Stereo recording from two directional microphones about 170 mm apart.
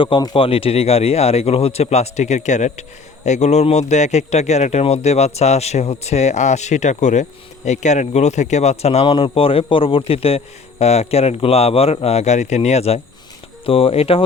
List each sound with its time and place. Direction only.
0.0 s a man's voice: 30° left (ahead or behind)